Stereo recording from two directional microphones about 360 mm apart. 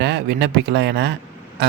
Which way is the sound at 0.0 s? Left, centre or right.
Right.